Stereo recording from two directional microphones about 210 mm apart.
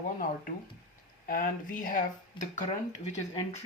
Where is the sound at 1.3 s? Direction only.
40° left (ahead or behind).